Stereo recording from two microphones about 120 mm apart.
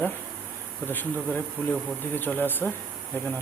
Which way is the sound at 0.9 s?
15° left (ahead or behind).